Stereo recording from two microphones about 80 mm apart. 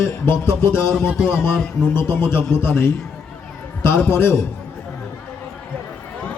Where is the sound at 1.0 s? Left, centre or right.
Centre.